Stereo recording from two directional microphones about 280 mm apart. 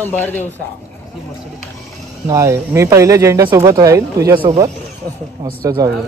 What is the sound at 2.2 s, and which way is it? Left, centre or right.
Speech, centre.